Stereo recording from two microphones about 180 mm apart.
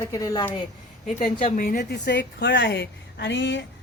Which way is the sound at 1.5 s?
55° left (ahead or behind).